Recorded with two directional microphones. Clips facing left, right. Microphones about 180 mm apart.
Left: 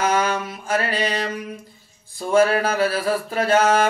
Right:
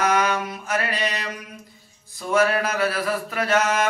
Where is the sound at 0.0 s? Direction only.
30° left (ahead or behind).